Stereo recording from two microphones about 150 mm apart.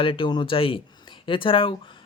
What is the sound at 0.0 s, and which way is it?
Speech, 35° left (ahead or behind).